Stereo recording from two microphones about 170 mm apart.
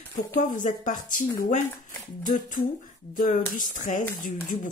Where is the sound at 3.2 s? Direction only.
50° left (ahead or behind).